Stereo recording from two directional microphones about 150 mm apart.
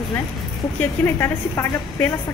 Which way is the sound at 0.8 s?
15° left (ahead or behind).